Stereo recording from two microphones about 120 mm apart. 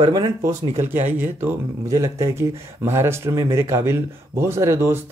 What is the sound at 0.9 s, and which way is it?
Speech, 15° right (ahead or behind).